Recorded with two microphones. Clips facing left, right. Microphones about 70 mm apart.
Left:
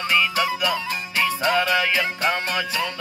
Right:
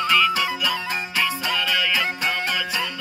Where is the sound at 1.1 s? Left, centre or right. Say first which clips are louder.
Left 5 dB; left.